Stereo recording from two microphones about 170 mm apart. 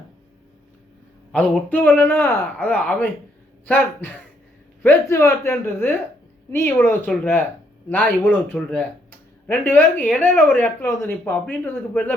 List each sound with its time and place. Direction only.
1.3 s speech: 5° left (ahead or behind)